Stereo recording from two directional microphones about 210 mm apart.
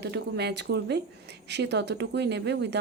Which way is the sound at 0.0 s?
55° right (ahead or behind).